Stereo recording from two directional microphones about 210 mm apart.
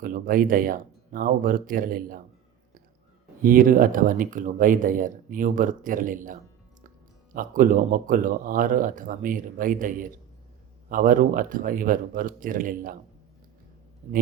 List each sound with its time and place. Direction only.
0.0 s speech: 40° right (ahead or behind)
3.4 s speech: 40° right (ahead or behind)